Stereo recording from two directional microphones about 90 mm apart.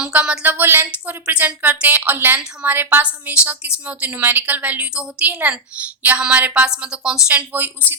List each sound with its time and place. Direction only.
0.0 s a woman's voice: 15° right (ahead or behind)